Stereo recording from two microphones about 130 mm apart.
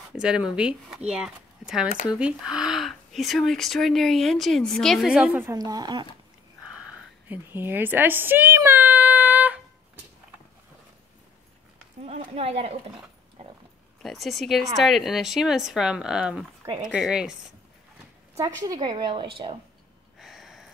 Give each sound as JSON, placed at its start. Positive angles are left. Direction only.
{"t": 0.1, "sound": "speech", "side_deg": -5}
{"t": 5.4, "sound": "a woman's voice", "side_deg": -30}
{"t": 7.2, "sound": "speech", "side_deg": -15}
{"t": 12.0, "sound": "speech", "side_deg": -55}
{"t": 14.0, "sound": "speech", "side_deg": 0}
{"t": 16.6, "sound": "speech", "side_deg": -40}
{"t": 16.9, "sound": "speech", "side_deg": -5}
{"t": 18.3, "sound": "a woman's voice", "side_deg": -30}
{"t": 20.2, "sound": "a sound", "side_deg": 0}